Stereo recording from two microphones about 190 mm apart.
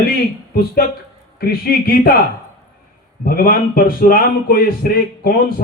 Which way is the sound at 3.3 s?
50° left (ahead or behind).